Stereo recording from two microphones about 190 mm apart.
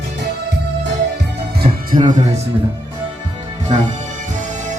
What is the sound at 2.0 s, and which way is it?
Speech, 40° right (ahead or behind).